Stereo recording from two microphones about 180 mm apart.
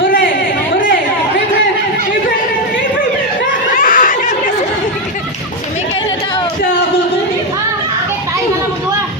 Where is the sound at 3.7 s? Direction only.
50° left (ahead or behind).